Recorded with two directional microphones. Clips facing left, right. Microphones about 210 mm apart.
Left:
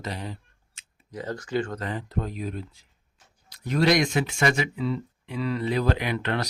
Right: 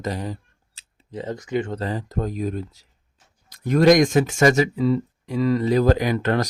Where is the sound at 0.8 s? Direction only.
25° right (ahead or behind).